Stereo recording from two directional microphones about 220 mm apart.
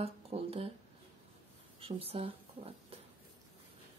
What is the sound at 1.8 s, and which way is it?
A woman's voice, 25° right (ahead or behind).